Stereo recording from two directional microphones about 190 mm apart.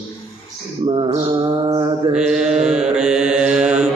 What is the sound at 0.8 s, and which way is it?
Mantra, 30° right (ahead or behind).